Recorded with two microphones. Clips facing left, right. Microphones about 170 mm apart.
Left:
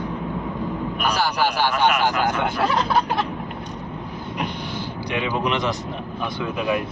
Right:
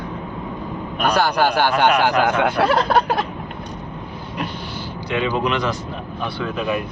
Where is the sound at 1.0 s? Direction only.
60° right (ahead or behind).